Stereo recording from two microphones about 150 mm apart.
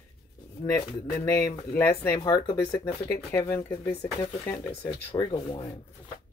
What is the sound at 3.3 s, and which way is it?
Speech, 15° left (ahead or behind).